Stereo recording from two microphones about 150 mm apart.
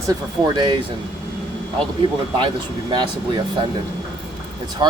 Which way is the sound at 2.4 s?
30° right (ahead or behind).